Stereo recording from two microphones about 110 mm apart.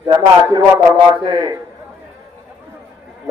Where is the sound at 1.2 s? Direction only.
40° right (ahead or behind).